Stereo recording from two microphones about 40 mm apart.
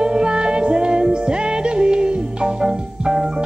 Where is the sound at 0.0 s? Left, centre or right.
Right.